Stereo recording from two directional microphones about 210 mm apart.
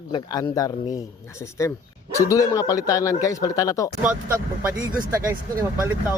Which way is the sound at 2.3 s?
15° left (ahead or behind).